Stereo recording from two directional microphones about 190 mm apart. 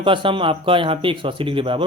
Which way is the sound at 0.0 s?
25° right (ahead or behind).